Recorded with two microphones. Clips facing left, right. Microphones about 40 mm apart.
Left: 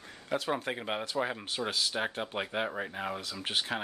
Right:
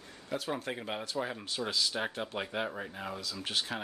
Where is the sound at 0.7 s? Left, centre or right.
Left.